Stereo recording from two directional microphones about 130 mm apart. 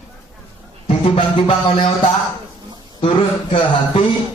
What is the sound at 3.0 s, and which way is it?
Speech, 45° left (ahead or behind).